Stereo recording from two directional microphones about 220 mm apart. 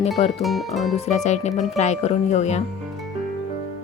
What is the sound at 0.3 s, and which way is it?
Speech, centre (ahead or behind).